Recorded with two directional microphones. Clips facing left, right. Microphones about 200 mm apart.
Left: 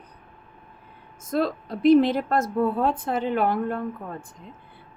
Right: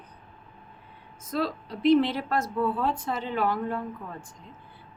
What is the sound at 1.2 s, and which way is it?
A woman's voice, 50° left (ahead or behind).